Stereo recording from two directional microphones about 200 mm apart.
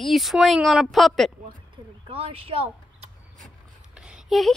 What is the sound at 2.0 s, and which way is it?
Speech, 30° right (ahead or behind).